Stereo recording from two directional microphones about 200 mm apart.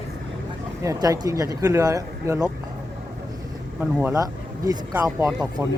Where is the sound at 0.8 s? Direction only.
20° right (ahead or behind).